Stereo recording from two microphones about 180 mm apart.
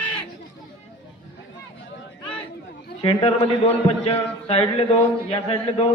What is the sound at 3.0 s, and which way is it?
A man's voice, 30° left (ahead or behind).